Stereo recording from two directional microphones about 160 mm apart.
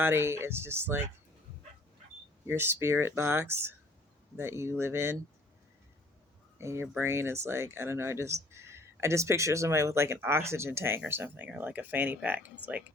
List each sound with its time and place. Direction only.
0.0 s speech: 15° right (ahead or behind)
2.5 s speech: 15° right (ahead or behind)
6.6 s speech: 20° right (ahead or behind)